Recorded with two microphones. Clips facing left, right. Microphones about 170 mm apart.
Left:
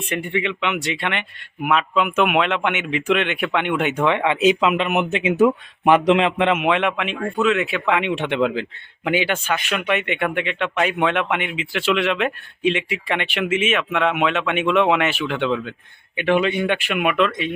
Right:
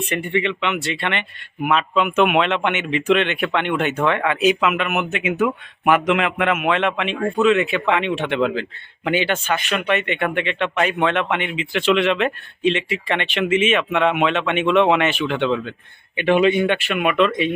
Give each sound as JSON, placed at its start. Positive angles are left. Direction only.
{"t": 0.1, "sound": "speech", "side_deg": 10}
{"t": 6.7, "sound": "speech", "side_deg": 10}
{"t": 8.1, "sound": "speech", "side_deg": 15}
{"t": 16.6, "sound": "speech", "side_deg": 10}